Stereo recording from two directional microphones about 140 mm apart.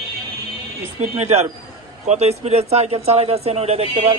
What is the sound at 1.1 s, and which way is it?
Speech, 55° right (ahead or behind).